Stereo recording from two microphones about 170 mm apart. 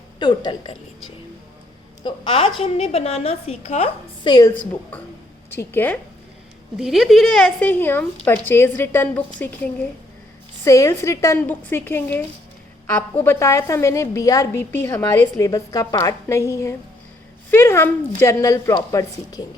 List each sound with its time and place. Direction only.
0.2 s a woman's voice: 25° left (ahead or behind)
2.0 s a woman's voice: 30° left (ahead or behind)
4.3 s a woman's voice: 25° left (ahead or behind)
5.5 s a woman's voice: 15° left (ahead or behind)
6.7 s a woman's voice: centre (ahead or behind)
10.6 s a woman's voice: 20° left (ahead or behind)